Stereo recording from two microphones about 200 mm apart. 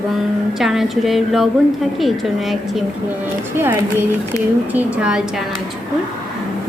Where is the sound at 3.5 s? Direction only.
10° right (ahead or behind).